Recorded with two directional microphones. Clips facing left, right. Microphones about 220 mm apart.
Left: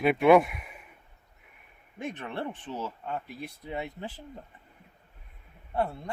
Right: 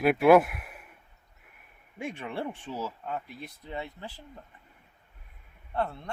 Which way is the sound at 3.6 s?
15° left (ahead or behind).